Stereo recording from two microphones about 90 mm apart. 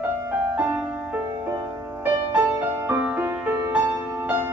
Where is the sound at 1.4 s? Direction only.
25° right (ahead or behind).